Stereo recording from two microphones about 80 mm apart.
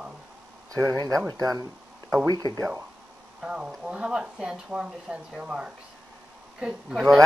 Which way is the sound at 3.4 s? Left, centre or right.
Centre.